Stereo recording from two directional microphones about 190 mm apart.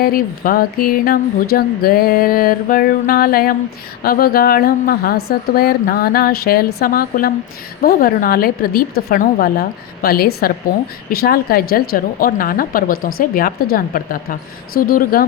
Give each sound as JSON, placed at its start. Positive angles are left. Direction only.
{"t": 0.0, "sound": "a woman's voice", "side_deg": 50}